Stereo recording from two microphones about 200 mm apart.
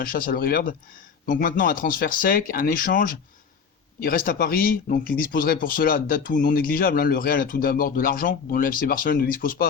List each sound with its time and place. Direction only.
0.0 s speech: 45° left (ahead or behind)